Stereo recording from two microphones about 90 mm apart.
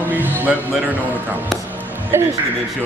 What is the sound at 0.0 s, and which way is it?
Speech, 20° right (ahead or behind).